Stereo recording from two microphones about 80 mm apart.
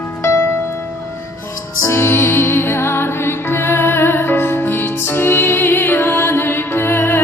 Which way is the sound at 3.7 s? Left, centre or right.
Left.